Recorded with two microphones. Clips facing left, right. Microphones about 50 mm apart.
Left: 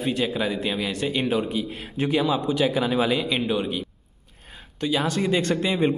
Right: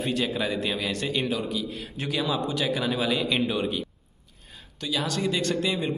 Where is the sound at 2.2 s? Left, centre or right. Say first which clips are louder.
Left 4 dB; centre.